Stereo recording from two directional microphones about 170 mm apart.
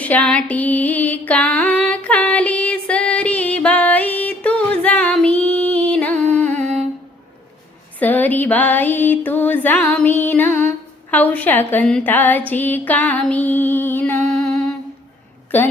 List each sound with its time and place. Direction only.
0.0 s a sound: 10° left (ahead or behind)
6.5 s humming: 40° right (ahead or behind)
7.9 s music: 10° left (ahead or behind)
15.5 s music: 10° left (ahead or behind)